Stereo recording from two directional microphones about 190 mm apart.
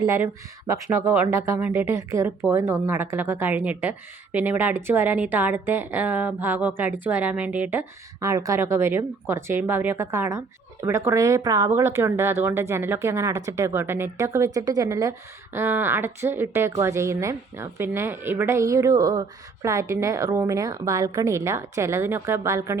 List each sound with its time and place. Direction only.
0.0 s speech: 15° right (ahead or behind)